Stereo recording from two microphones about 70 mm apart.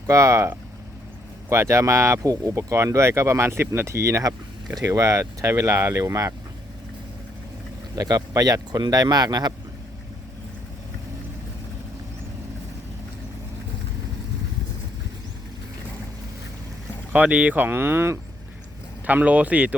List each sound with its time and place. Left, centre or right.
0.1 s speech: right
7.9 s speech: right
17.1 s speech: right
19.0 s speech: right